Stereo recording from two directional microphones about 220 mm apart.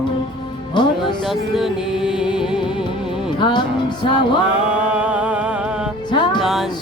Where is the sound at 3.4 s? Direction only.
20° left (ahead or behind).